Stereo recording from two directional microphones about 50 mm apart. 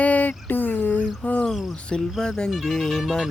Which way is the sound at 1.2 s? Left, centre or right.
Left.